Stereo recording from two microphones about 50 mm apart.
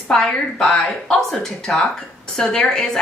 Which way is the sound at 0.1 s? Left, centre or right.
Centre.